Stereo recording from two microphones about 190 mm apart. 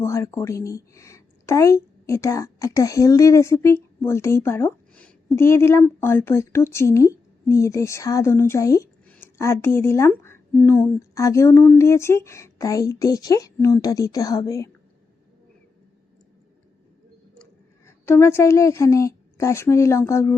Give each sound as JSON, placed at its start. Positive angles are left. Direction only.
{"t": 0.0, "sound": "a woman's voice", "side_deg": 15}
{"t": 17.3, "sound": "a woman's voice", "side_deg": 10}